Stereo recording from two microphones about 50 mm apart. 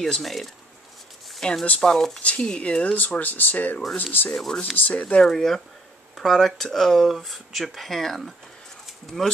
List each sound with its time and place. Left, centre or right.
0.0 s speech: centre; by 4.3 s left
4.3 s speech: centre
4.7 s speech: left
5.0 s speech: centre
8.8 s a sound: centre